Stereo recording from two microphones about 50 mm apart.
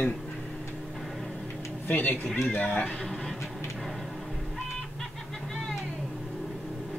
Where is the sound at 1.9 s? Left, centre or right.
Left.